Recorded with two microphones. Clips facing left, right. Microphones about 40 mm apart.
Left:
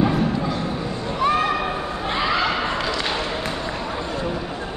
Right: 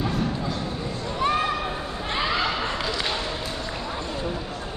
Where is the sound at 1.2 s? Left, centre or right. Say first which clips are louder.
Left 4 dB; centre.